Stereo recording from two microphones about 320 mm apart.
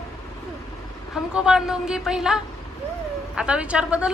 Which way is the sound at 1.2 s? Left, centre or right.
Centre.